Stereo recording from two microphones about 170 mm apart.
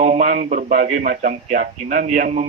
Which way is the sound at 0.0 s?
45° right (ahead or behind).